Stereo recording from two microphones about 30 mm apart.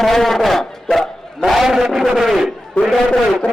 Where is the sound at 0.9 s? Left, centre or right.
Centre.